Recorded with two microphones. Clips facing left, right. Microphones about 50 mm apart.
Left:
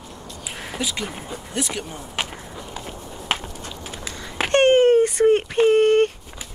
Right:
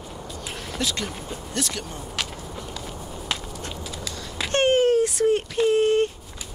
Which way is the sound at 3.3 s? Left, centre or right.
Left.